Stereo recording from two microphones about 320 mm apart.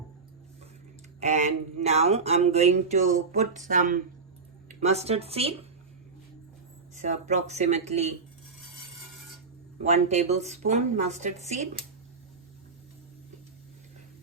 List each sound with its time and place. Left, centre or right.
1.2 s speech: right
6.9 s speech: right
9.8 s speech: centre